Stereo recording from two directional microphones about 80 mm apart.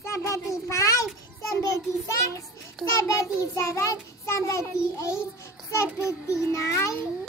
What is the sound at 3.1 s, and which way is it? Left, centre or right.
Child singing, left.